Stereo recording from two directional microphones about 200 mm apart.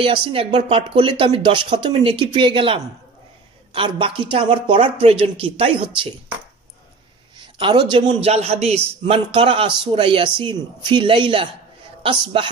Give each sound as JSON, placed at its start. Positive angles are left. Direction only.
{"t": 0.0, "sound": "a man's voice", "side_deg": -25}
{"t": 7.3, "sound": "a man's voice", "side_deg": -25}